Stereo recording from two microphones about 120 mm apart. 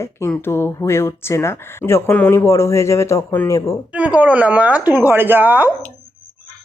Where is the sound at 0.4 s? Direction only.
20° left (ahead or behind).